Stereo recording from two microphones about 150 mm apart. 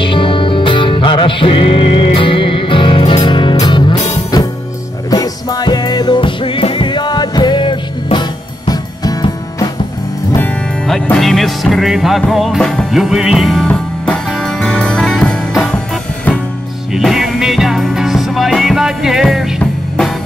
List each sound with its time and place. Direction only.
0.0 s music: 35° left (ahead or behind)
5.1 s music: 25° left (ahead or behind)
10.9 s music: centre (ahead or behind)
16.9 s music: centre (ahead or behind)